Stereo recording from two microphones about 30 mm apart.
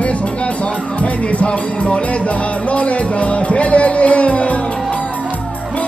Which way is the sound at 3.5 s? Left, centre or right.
Left.